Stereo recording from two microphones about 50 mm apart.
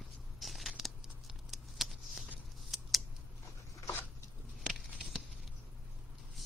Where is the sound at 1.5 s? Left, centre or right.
Centre.